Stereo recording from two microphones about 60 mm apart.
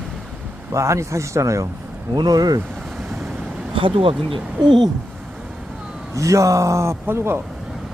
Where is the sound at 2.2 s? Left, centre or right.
Right.